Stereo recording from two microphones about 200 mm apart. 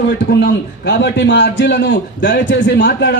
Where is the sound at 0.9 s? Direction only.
60° left (ahead or behind).